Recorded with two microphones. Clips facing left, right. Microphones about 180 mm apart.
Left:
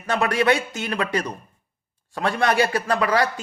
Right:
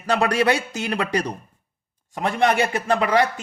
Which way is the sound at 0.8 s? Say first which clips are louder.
Right 1 dB; 25° right (ahead or behind).